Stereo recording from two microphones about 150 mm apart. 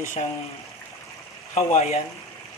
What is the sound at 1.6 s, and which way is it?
Speech, 45° left (ahead or behind).